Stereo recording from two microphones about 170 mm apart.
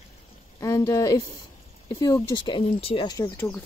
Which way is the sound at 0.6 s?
20° left (ahead or behind).